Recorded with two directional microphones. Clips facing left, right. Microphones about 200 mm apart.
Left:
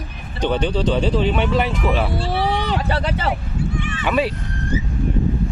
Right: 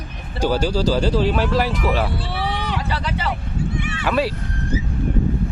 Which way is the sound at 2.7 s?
55° left (ahead or behind).